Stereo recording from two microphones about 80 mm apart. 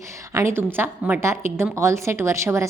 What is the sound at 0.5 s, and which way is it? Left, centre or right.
A woman's voice, right.